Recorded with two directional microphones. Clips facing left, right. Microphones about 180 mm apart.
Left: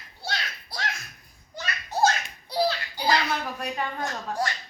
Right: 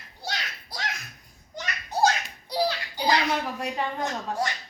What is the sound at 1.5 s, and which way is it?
Children playing, 15° right (ahead or behind).